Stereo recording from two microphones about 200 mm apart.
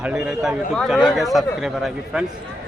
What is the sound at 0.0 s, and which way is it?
Speech, 5° right (ahead or behind).